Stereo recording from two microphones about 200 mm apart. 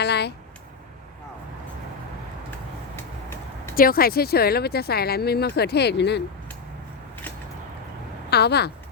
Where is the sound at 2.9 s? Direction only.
10° left (ahead or behind).